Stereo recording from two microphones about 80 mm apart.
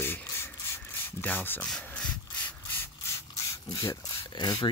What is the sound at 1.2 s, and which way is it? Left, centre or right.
Speech, left.